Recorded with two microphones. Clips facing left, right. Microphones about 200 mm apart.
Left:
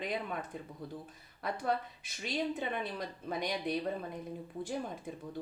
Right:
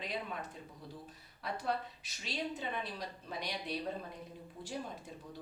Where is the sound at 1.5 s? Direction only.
50° left (ahead or behind).